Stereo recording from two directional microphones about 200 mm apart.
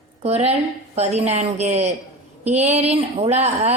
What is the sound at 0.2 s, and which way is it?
A woman's voice, 30° right (ahead or behind).